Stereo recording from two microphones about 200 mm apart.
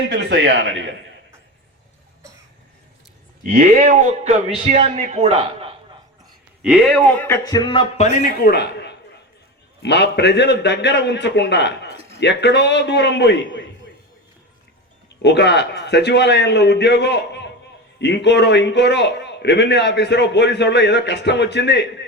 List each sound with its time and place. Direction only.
0.1 s speech: 60° right (ahead or behind)
3.4 s a man's voice: 40° right (ahead or behind)
6.6 s speech: centre (ahead or behind)
7.3 s speech: 15° left (ahead or behind)
8.4 s a man's voice: 55° left (ahead or behind)
15.2 s a man's voice: 55° left (ahead or behind)